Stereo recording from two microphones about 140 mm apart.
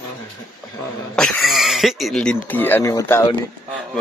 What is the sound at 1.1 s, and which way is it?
Speech, 5° left (ahead or behind).